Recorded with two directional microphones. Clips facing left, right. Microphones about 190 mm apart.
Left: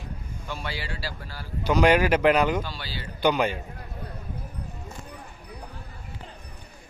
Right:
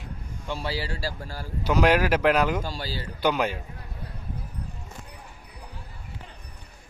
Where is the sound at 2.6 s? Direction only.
40° right (ahead or behind).